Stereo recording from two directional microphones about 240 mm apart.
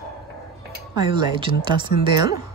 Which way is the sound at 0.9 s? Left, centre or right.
Centre.